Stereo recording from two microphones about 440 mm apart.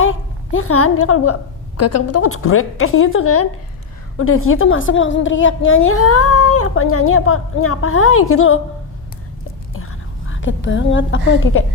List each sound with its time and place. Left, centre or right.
0.0 s a woman's voice: left
9.7 s whispering: left
11.3 s a woman's voice: left